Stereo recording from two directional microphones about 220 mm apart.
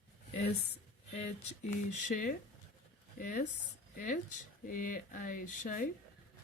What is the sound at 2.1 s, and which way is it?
Speech, 40° left (ahead or behind).